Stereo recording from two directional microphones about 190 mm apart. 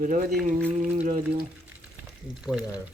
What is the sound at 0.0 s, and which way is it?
Speech, 45° right (ahead or behind).